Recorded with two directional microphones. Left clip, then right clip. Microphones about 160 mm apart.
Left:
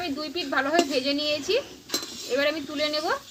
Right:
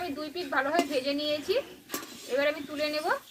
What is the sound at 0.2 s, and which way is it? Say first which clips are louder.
Speech: left 3 dB; 30° left (ahead or behind).